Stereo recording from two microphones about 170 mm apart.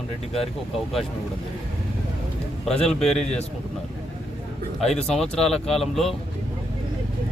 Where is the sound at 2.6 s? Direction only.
5° left (ahead or behind).